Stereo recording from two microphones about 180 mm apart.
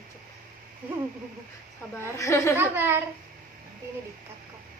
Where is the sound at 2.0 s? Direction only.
15° left (ahead or behind).